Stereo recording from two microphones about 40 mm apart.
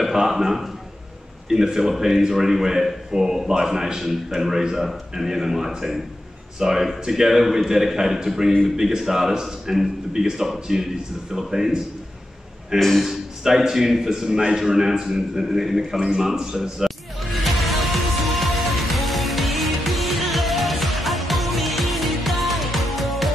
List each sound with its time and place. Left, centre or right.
0.0 s a man's voice: centre
12.7 s a man's voice: centre
13.0 s a man's voice: centre
16.0 s speech: right
16.3 s music: centre